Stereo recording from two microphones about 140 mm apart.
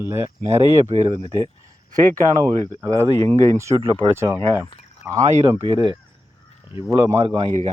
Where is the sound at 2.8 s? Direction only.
20° right (ahead or behind).